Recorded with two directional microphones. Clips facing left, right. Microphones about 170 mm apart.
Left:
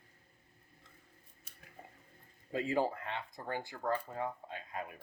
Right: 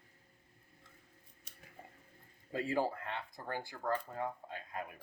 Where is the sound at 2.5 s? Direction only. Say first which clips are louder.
Left 2 dB; 20° left (ahead or behind).